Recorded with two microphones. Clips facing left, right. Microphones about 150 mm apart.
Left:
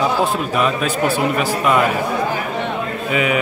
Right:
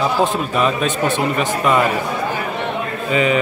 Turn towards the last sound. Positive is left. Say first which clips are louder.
# right 2 dB
turn(degrees=10)  # may be behind; listen again after turning